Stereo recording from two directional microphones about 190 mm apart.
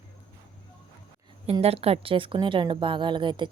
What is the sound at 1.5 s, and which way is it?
A woman's voice, 30° right (ahead or behind).